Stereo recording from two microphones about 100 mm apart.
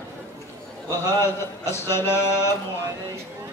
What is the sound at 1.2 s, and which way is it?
Chant, 25° left (ahead or behind).